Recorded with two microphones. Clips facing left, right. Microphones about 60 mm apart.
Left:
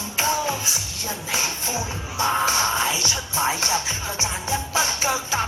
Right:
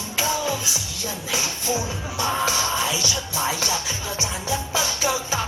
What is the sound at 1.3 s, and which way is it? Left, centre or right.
Music, left.